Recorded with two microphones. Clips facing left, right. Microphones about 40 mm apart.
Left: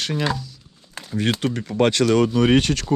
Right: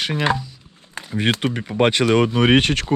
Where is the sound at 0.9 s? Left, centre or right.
Centre.